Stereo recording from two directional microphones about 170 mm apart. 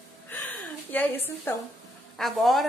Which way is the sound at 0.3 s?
10° left (ahead or behind).